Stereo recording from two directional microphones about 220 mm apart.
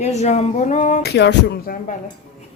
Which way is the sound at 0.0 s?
30° left (ahead or behind).